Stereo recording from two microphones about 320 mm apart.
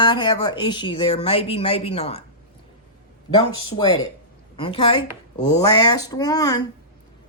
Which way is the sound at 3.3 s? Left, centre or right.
Centre.